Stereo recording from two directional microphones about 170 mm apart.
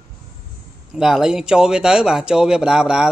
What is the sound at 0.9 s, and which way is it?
Speech, 5° right (ahead or behind).